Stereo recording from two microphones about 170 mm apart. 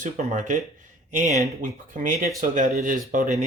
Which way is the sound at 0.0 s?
45° right (ahead or behind).